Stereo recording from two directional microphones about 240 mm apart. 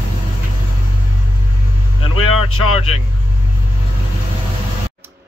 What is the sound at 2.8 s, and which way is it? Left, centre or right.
Speech, left.